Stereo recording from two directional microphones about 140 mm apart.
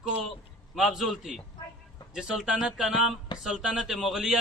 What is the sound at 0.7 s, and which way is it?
A man's voice, centre (ahead or behind).